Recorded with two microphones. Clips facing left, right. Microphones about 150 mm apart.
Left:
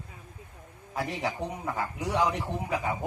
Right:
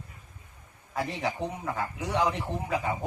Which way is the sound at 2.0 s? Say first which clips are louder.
Even; 15° left (ahead or behind).